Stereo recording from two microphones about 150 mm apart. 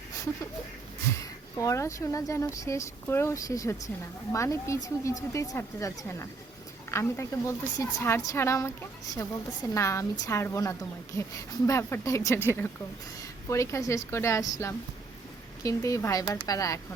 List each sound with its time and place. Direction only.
1.5 s a woman's voice: 20° left (ahead or behind)